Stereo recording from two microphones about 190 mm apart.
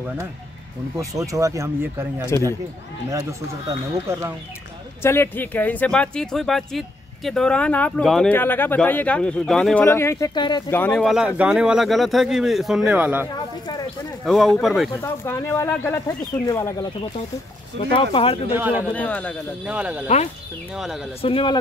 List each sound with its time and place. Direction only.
0.9 s speech: 15° right (ahead or behind)
5.0 s speech: 10° left (ahead or behind)
9.8 s speech: 15° left (ahead or behind)
10.7 s speech: 5° left (ahead or behind)
15.0 s speech: 15° left (ahead or behind)
17.9 s speech: 30° left (ahead or behind)
18.6 s speech: 10° right (ahead or behind)
18.9 s speech: 10° left (ahead or behind)
19.6 s speech: 5° right (ahead or behind)
21.2 s speech: 30° left (ahead or behind)